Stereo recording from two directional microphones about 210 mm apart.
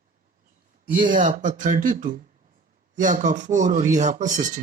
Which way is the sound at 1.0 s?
40° right (ahead or behind).